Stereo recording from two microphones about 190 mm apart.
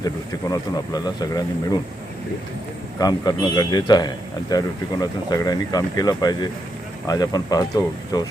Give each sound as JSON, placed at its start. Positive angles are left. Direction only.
{"t": 0.0, "sound": "speech", "side_deg": 20}
{"t": 3.0, "sound": "speech", "side_deg": 20}